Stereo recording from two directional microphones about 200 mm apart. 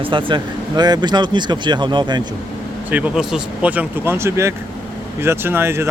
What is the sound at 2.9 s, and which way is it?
Speech, 10° right (ahead or behind).